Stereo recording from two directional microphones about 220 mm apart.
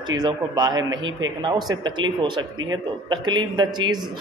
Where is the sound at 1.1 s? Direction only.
60° right (ahead or behind).